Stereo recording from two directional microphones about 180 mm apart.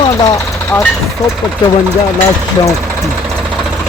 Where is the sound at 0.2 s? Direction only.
20° left (ahead or behind).